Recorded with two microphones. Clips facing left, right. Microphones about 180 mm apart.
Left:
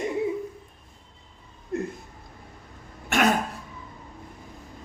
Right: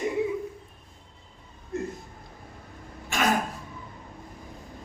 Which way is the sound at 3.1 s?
65° left (ahead or behind).